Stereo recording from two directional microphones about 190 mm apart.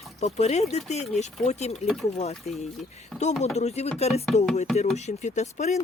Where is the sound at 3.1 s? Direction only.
Centre (ahead or behind).